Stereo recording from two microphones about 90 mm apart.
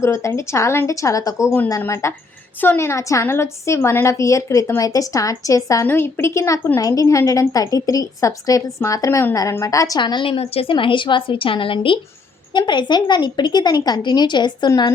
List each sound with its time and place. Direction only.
0.0 s a woman's voice: 30° left (ahead or behind)
5.9 s a woman's voice: 25° left (ahead or behind)
10.0 s a woman's voice: 60° left (ahead or behind)
12.5 s a woman's voice: 55° left (ahead or behind)